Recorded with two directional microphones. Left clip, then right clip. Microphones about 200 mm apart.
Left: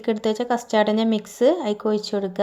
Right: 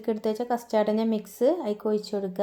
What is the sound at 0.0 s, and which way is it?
Speech, 15° left (ahead or behind).